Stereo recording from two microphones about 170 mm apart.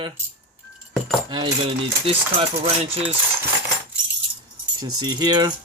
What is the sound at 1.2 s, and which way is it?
Speech, 25° right (ahead or behind).